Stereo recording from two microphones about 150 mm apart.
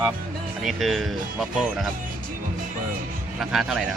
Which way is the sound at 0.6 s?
Centre (ahead or behind).